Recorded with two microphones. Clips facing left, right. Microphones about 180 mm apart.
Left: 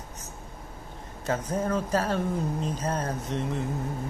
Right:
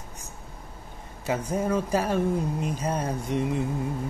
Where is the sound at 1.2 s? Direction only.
10° right (ahead or behind).